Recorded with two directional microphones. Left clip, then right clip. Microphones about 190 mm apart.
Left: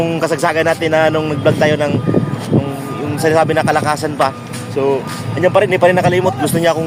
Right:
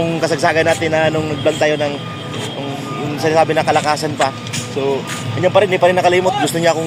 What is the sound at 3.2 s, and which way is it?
Speech, 25° left (ahead or behind).